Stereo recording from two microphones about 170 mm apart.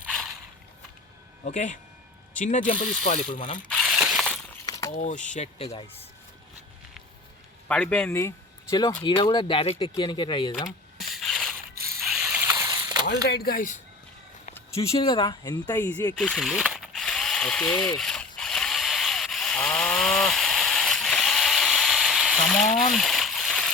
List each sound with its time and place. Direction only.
1.5 s speech: 45° left (ahead or behind)
3.8 s a sound: centre (ahead or behind)
4.6 s a sound: 20° left (ahead or behind)
4.9 s speech: 45° left (ahead or behind)
7.7 s a man's voice: 10° left (ahead or behind)
8.7 s speech: 25° left (ahead or behind)
10.7 s mechanisms: centre (ahead or behind); by 13.1 s 20° right (ahead or behind)
13.1 s speech: 70° left (ahead or behind); by 13.7 s 55° left (ahead or behind)
14.9 s speech: 25° left (ahead or behind)
16.1 s ratchet: centre (ahead or behind)
22.9 s a sound: centre (ahead or behind)